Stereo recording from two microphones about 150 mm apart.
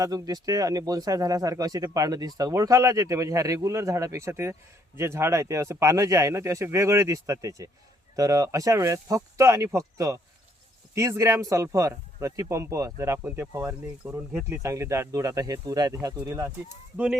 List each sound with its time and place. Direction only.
0.0 s speech: 25° right (ahead or behind)